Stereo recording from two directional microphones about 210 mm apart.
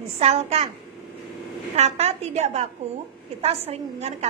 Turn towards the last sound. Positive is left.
turn(degrees=-30)  # may be behind; listen again after turning